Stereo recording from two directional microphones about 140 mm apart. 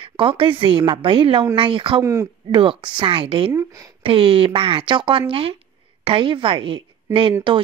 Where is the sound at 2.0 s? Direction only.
20° right (ahead or behind).